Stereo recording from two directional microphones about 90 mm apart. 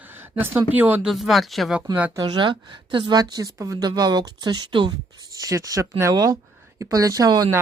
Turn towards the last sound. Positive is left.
turn(degrees=-45)  # may be behind; listen again after turning